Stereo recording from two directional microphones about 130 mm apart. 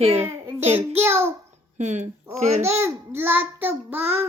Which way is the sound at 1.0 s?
20° right (ahead or behind).